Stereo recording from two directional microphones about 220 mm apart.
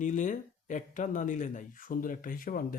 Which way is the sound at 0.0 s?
35° left (ahead or behind).